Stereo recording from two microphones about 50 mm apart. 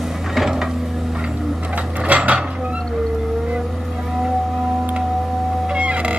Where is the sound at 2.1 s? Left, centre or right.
Right.